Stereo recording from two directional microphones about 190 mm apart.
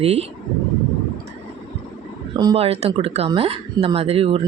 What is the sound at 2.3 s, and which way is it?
Speech, 25° right (ahead or behind).